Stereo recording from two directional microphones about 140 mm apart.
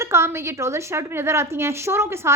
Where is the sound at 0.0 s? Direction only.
20° right (ahead or behind).